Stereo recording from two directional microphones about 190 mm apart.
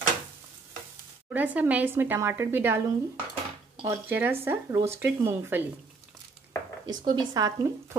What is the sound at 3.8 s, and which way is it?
Stir, 10° right (ahead or behind).